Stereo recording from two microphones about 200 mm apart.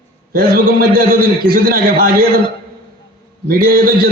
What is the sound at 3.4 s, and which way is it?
Speech, 45° right (ahead or behind).